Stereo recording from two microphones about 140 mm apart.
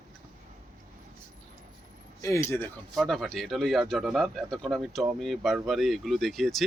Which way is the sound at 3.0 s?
Centre (ahead or behind).